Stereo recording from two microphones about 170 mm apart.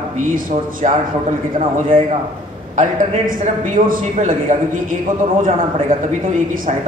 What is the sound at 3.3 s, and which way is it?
A man's voice, 55° right (ahead or behind).